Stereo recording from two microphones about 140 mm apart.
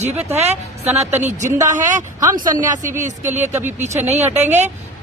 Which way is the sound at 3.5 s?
15° right (ahead or behind).